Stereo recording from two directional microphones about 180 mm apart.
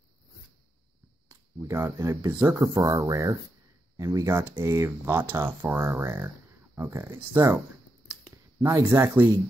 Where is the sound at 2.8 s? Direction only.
35° right (ahead or behind).